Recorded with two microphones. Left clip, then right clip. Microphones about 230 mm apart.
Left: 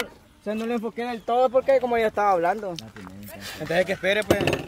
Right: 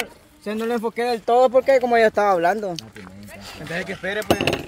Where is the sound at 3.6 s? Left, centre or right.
Left.